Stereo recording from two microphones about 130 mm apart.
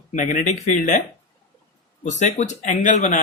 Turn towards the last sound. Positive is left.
turn(degrees=70)  # may be behind; listen again after turning